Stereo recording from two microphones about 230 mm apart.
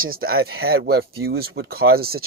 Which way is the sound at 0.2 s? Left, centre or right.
Right.